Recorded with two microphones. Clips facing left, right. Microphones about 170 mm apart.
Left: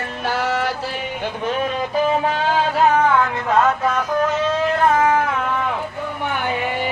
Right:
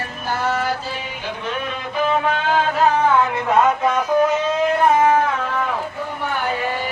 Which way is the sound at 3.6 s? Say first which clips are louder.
Right 1 dB; 10° right (ahead or behind).